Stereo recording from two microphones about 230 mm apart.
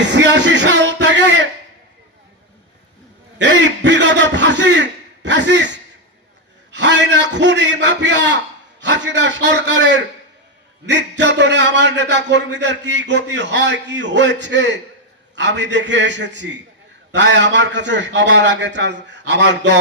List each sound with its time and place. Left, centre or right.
0.0 s music: right
3.3 s a man's voice: right